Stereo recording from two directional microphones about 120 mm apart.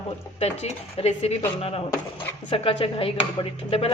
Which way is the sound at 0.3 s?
60° left (ahead or behind).